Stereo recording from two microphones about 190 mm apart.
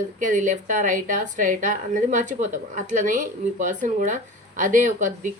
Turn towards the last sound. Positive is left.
turn(degrees=-40)  # may be behind; listen again after turning